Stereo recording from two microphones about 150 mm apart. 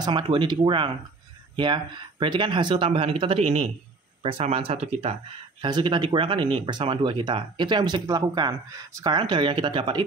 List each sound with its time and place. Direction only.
0.0 s speech: 30° right (ahead or behind)